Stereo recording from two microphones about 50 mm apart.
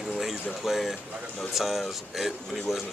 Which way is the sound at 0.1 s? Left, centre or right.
Centre.